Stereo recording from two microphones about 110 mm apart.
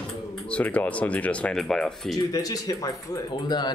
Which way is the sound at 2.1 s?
35° left (ahead or behind).